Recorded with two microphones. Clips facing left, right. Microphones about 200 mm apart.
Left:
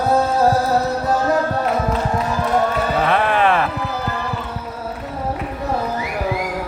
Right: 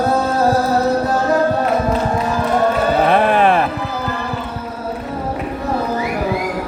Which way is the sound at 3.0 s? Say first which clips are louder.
Right 4 dB; 45° right (ahead or behind).